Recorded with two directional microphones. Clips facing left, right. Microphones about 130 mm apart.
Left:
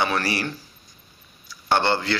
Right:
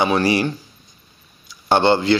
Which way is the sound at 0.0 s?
20° right (ahead or behind).